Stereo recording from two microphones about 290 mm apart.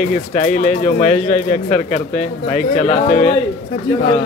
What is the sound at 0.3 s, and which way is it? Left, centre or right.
Speech, left.